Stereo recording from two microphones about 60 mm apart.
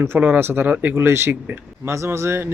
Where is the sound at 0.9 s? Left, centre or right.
Right.